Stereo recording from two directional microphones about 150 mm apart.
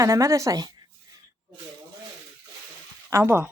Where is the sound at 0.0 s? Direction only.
20° right (ahead or behind).